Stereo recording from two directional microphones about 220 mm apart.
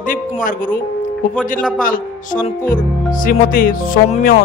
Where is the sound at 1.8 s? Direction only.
40° left (ahead or behind).